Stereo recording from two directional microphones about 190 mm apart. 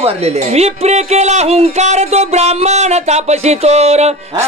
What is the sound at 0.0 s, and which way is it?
Speech, 35° right (ahead or behind).